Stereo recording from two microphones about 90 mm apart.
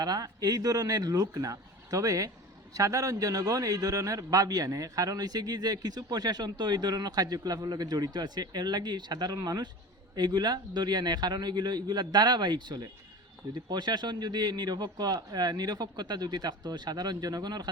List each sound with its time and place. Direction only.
0.0 s speech: 45° right (ahead or behind)